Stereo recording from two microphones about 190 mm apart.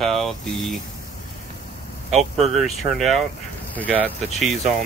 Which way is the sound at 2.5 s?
Centre (ahead or behind).